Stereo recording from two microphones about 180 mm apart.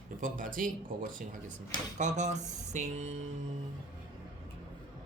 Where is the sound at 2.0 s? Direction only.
40° right (ahead or behind).